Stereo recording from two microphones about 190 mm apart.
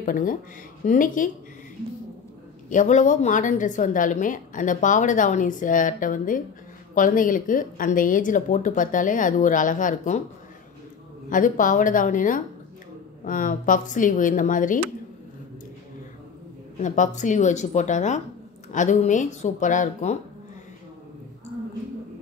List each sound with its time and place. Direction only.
0.0 s a woman's voice: 45° left (ahead or behind)
2.7 s a woman's voice: 40° left (ahead or behind)
11.2 s a woman's voice: 45° left (ahead or behind)
16.8 s speech: 40° left (ahead or behind)